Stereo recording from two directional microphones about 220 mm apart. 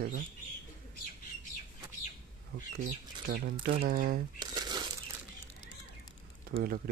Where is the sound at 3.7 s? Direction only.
40° right (ahead or behind).